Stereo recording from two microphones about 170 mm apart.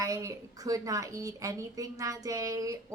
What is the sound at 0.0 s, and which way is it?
A woman's voice, 20° right (ahead or behind).